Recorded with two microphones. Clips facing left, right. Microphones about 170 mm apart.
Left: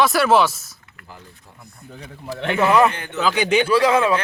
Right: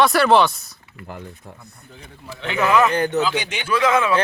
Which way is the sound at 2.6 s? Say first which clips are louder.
Left 1 dB; 30° left (ahead or behind).